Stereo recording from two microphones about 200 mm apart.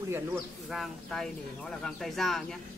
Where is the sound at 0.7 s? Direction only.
Centre (ahead or behind).